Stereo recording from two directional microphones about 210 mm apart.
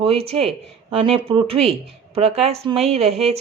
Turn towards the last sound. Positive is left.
turn(degrees=-30)  # may be behind; listen again after turning